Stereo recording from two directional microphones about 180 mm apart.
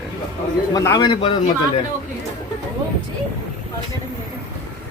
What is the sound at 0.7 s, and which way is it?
Speech, 20° left (ahead or behind).